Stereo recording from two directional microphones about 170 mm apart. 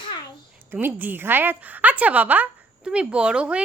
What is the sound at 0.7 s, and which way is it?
A woman's voice, 10° right (ahead or behind).